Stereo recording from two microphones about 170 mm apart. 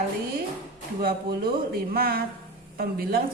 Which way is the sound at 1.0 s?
65° right (ahead or behind).